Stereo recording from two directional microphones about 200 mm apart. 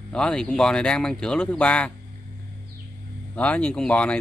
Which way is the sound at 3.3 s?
5° left (ahead or behind).